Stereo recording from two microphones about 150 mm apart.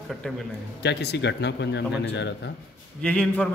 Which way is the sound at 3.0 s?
5° left (ahead or behind).